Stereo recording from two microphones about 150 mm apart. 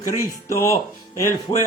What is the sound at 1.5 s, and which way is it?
Speech, 40° left (ahead or behind).